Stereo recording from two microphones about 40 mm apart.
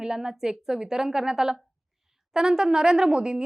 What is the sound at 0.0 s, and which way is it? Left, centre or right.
A woman's voice, centre.